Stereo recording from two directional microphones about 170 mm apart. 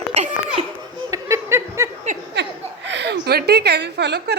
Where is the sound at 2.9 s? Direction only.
85° right; by 4.4 s 70° right (ahead or behind).